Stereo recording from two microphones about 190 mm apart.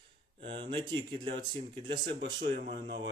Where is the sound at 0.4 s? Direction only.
25° right (ahead or behind).